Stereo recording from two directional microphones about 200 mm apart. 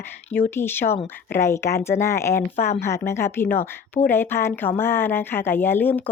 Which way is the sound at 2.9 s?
15° left (ahead or behind).